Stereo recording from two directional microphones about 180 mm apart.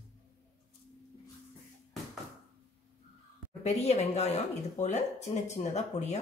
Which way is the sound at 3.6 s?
35° left (ahead or behind).